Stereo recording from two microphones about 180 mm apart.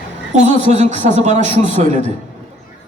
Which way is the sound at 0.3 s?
40° right (ahead or behind).